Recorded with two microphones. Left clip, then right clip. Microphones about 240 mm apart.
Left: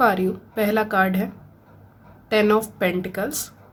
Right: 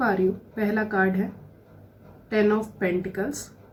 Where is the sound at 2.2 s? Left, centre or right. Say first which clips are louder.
Left 4 dB; left.